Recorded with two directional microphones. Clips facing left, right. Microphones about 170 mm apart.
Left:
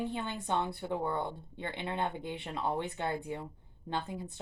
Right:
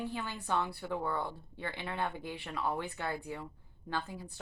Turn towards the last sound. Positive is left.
turn(degrees=20)  # may be behind; listen again after turning